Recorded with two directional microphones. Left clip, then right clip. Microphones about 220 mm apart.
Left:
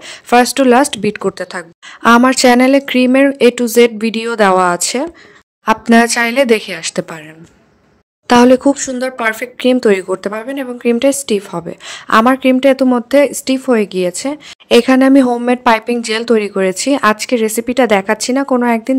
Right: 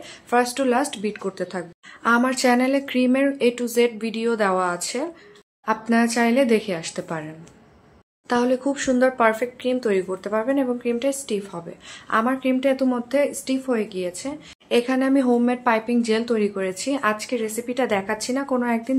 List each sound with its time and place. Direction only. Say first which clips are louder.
0.1 s a woman's voice: left 10 dB; 50° left (ahead or behind)
8.3 s a woman's voice: left 13 dB; 50° left (ahead or behind)